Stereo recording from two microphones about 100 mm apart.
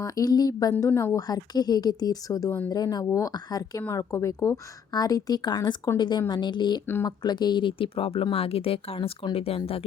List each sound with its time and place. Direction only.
0.0 s speech: 35° left (ahead or behind)
0.9 s speech: 20° left (ahead or behind)
1.1 s a woman's voice: 40° left (ahead or behind); by 9.8 s 75° left (ahead or behind)